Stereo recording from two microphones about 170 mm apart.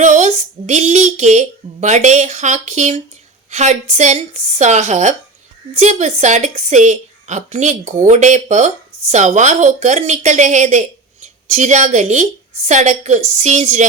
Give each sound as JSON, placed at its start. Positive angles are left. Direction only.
{"t": 0.0, "sound": "speech", "side_deg": -45}